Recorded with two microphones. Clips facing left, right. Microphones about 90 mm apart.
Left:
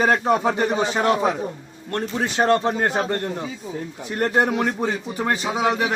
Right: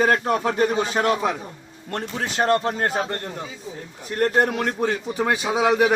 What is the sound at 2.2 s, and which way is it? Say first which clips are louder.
Speech: left 2 dB; 15° left (ahead or behind).